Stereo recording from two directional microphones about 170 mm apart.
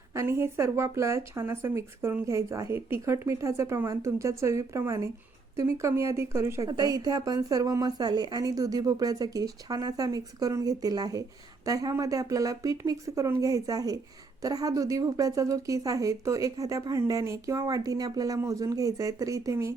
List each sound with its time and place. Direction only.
0.1 s a woman's voice: 15° right (ahead or behind)